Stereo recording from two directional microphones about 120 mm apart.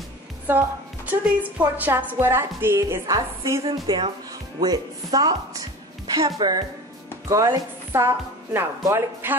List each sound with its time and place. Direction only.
0.5 s music: 20° right (ahead or behind)
1.8 s a woman's voice: 15° right (ahead or behind)